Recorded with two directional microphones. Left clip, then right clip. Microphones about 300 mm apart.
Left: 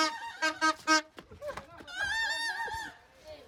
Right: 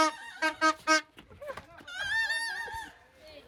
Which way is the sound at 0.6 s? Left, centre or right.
Centre.